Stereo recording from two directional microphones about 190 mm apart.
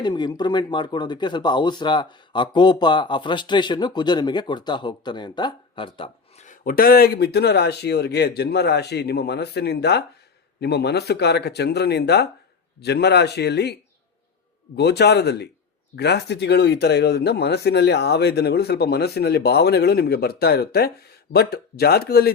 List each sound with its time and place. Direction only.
0.0 s speech: 20° left (ahead or behind)
6.4 s speech: 45° left (ahead or behind)
14.8 s speech: 60° left (ahead or behind)